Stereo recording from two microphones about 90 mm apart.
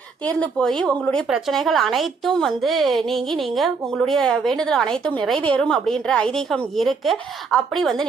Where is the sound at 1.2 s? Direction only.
Centre (ahead or behind).